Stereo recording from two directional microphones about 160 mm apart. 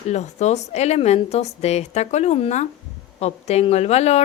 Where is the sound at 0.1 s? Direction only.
45° left (ahead or behind).